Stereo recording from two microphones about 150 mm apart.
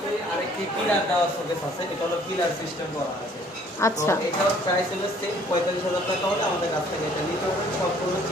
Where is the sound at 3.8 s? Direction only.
20° left (ahead or behind).